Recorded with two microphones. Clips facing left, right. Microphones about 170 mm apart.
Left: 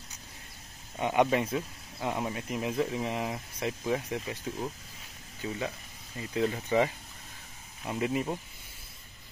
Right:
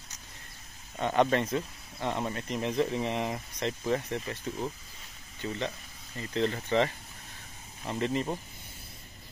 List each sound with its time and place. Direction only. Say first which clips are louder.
0.9 s speech: even; 10° left (ahead or behind)